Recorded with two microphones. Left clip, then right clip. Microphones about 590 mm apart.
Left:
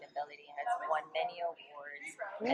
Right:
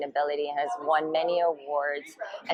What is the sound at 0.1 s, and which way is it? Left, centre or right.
Speech, right.